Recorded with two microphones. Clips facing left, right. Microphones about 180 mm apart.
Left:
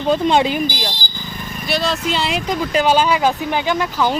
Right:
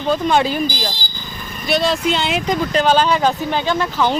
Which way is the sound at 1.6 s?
Centre (ahead or behind).